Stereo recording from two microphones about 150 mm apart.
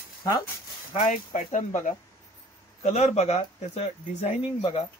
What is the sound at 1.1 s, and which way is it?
Speech, 55° left (ahead or behind).